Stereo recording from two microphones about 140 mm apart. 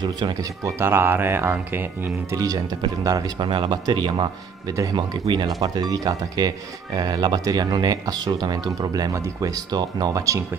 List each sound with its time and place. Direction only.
0.0 s speech: 25° right (ahead or behind)
2.4 s speech: 25° right (ahead or behind)